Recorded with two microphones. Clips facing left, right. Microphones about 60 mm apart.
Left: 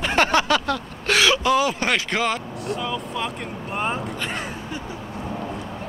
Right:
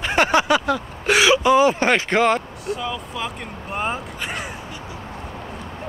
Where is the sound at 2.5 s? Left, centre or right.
Centre.